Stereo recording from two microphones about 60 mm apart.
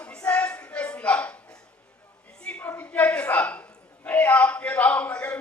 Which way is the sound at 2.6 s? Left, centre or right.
Left.